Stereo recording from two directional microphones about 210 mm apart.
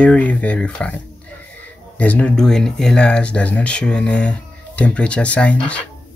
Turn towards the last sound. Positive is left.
turn(degrees=5)  # may be behind; listen again after turning